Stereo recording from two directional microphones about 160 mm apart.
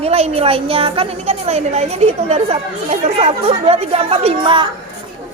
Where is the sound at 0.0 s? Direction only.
40° right (ahead or behind).